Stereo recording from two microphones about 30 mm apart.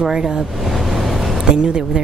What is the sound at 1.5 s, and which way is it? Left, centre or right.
Speech, right.